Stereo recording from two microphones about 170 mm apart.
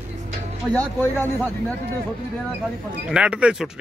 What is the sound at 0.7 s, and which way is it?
Speech, 10° left (ahead or behind).